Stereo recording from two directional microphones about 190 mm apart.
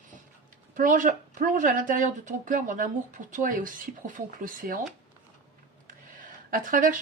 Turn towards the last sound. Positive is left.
turn(degrees=-45)  # may be behind; listen again after turning